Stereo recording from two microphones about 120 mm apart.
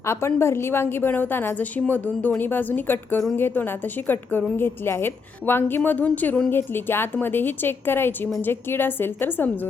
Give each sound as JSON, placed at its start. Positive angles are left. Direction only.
{"t": 0.0, "sound": "a woman's voice", "side_deg": 20}